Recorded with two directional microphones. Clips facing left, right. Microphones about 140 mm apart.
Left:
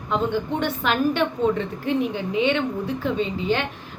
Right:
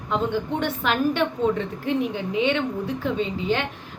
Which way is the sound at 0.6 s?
5° right (ahead or behind).